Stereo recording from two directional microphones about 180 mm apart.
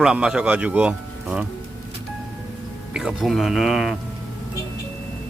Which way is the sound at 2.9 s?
5° right (ahead or behind).